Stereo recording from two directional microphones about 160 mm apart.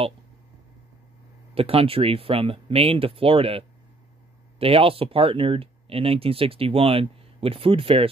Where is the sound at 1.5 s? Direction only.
35° right (ahead or behind).